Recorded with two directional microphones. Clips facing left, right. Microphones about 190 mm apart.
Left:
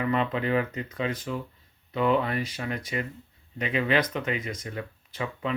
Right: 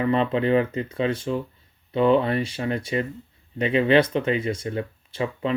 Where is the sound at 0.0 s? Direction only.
30° right (ahead or behind).